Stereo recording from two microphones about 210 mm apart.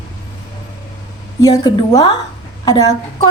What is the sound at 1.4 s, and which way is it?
A woman's voice, 15° left (ahead or behind).